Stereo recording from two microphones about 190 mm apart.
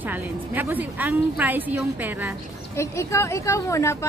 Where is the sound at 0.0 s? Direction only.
10° right (ahead or behind).